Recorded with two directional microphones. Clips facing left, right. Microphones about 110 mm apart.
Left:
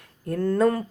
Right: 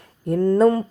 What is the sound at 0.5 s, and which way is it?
Speech, 25° right (ahead or behind).